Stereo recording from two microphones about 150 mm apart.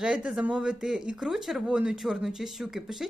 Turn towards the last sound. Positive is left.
turn(degrees=0)  # may be behind; listen again after turning